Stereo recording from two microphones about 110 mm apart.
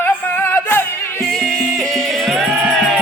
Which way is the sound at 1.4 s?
5° right (ahead or behind).